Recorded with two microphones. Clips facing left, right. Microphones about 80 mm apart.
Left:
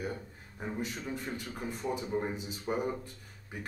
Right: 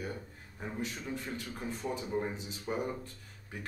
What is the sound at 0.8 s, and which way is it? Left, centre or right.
A man's voice, centre.